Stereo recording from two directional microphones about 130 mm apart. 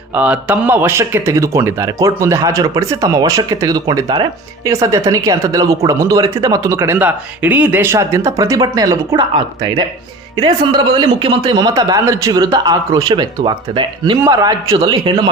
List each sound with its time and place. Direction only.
0.1 s speech: 10° right (ahead or behind); by 9.1 s 25° right (ahead or behind)
9.1 s speech: 40° right (ahead or behind)
11.7 s speech: 25° right (ahead or behind)
14.3 s speech: 25° right (ahead or behind)